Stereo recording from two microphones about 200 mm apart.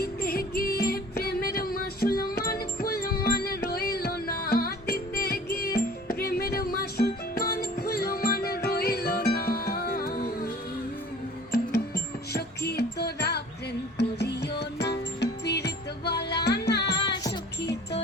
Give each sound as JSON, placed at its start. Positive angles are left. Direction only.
{"t": 0.0, "sound": "music", "side_deg": 50}
{"t": 11.5, "sound": "music", "side_deg": 55}